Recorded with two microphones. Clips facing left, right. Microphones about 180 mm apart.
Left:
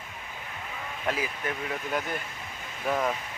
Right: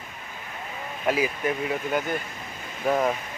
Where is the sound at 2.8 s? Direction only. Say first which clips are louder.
Right 5 dB; 20° right (ahead or behind).